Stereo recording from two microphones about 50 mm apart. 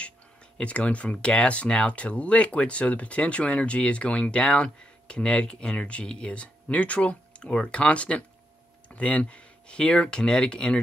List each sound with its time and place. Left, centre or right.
0.6 s speech: left